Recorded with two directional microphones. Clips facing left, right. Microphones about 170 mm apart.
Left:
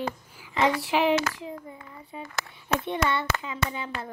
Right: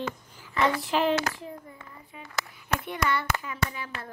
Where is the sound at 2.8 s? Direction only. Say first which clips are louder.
Left 1 dB; 25° left (ahead or behind).